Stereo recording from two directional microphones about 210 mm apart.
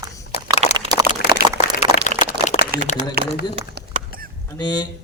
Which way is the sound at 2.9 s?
35° left (ahead or behind).